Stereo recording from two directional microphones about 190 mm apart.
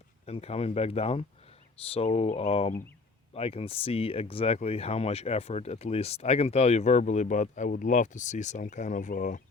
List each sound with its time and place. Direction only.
0.3 s speech: 35° left (ahead or behind)